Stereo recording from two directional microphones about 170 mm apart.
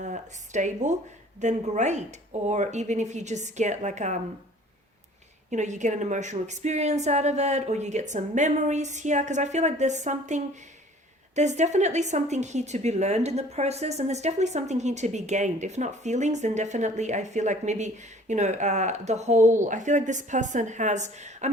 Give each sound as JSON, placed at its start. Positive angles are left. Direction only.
{"t": 0.0, "sound": "a woman's voice", "side_deg": -45}
{"t": 5.5, "sound": "a woman's voice", "side_deg": -45}